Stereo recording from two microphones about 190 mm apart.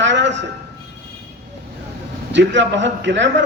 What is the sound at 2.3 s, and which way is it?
A man's voice, 70° right (ahead or behind).